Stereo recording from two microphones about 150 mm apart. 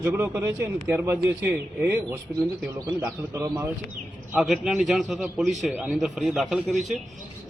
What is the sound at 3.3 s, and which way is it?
Speech, 15° right (ahead or behind).